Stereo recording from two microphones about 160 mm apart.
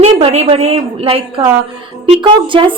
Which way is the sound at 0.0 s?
40° right (ahead or behind).